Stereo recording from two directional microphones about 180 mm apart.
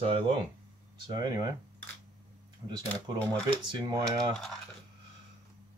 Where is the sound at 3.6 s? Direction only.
25° right (ahead or behind).